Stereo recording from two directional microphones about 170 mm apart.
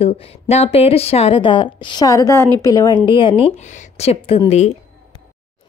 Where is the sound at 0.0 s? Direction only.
35° left (ahead or behind); by 3.1 s 20° left (ahead or behind).